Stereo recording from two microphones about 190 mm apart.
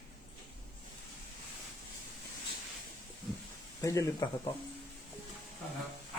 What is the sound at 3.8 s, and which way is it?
Speech, 15° left (ahead or behind).